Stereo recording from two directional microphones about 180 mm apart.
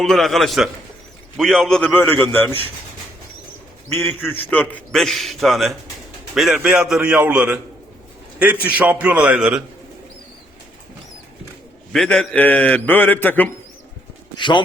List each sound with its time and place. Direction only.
0.0 s a man's voice: centre (ahead or behind)
3.8 s a man's voice: 10° left (ahead or behind); by 9.6 s 5° right (ahead or behind)
11.9 s a man's voice: 5° left (ahead or behind)
14.3 s speech: 25° left (ahead or behind)